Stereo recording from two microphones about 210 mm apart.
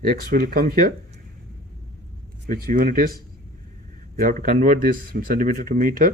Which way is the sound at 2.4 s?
40° right (ahead or behind).